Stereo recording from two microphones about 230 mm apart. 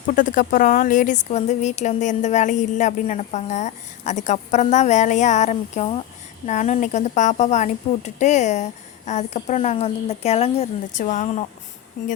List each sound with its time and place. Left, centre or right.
0.1 s a woman's voice: left